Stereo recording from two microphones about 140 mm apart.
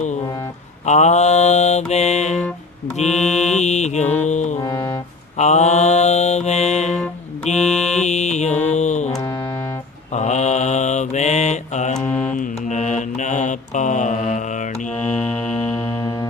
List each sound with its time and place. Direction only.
0.9 s mantra: 55° left (ahead or behind)
3.1 s mantra: 5° left (ahead or behind)
3.5 s mantra: 55° left (ahead or behind)
4.3 s music: 55° left (ahead or behind)
5.4 s mantra: 55° left (ahead or behind)
6.9 s music: 5° left (ahead or behind)
7.6 s a sound: 5° left (ahead or behind)
8.0 s mantra: 55° left (ahead or behind)
8.7 s music: 55° left (ahead or behind)
9.1 s music: 15° left (ahead or behind)
10.1 s mantra: 55° left (ahead or behind)
12.3 s music: 70° left (ahead or behind)
12.5 s mantra: 60° left (ahead or behind)
15.6 s music: 20° left (ahead or behind)